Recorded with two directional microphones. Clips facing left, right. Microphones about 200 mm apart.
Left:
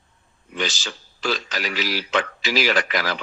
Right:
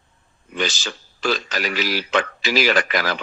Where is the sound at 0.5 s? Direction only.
50° right (ahead or behind).